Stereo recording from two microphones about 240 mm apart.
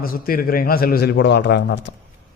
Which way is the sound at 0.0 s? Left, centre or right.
Left.